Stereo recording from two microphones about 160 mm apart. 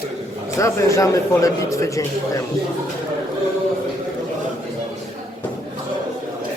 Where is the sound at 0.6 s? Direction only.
20° left (ahead or behind).